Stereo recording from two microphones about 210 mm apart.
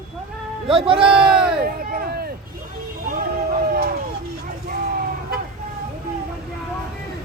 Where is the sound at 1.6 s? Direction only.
45° right (ahead or behind).